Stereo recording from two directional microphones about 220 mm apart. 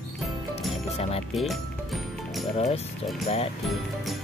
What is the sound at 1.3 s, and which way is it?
Music, centre (ahead or behind).